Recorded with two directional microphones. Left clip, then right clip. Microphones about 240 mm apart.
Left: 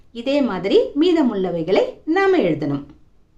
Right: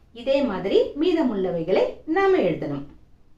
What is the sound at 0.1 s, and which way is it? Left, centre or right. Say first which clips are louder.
A woman's voice: left 2 dB; left.